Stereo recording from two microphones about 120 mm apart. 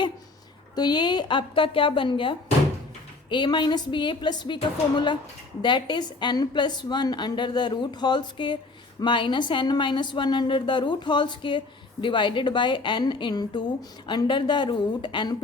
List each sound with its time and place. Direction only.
0.8 s a woman's voice: 40° left (ahead or behind)